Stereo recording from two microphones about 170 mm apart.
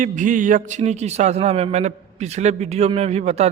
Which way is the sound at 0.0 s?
50° right (ahead or behind).